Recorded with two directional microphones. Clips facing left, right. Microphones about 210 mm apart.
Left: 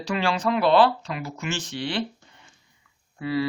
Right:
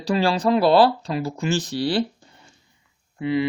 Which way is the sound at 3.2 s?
20° right (ahead or behind).